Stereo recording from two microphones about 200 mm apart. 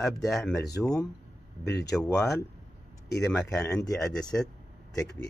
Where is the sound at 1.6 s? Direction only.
55° left (ahead or behind).